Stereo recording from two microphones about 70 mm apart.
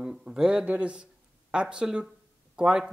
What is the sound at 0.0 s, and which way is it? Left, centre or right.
A man's voice, centre.